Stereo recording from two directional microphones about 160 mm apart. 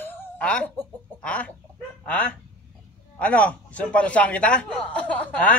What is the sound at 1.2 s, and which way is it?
Chicken, 10° left (ahead or behind).